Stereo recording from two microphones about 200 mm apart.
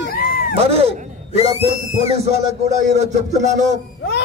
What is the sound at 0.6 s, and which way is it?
A man's voice, 30° right (ahead or behind).